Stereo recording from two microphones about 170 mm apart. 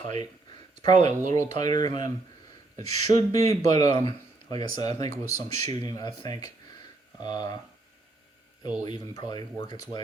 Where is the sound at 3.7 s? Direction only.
20° left (ahead or behind).